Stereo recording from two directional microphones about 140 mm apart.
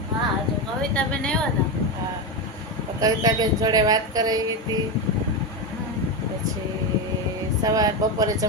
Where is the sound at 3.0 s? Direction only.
25° right (ahead or behind).